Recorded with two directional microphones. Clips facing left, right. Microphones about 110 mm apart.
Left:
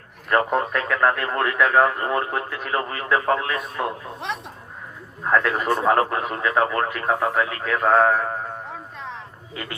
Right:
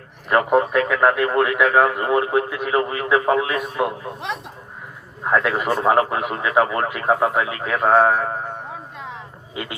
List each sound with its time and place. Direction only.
0.3 s speech: 15° right (ahead or behind)
4.2 s speech: centre (ahead or behind)
5.2 s speech: 15° right (ahead or behind)
8.7 s a sound: 5° right (ahead or behind)
9.6 s speech: 20° right (ahead or behind)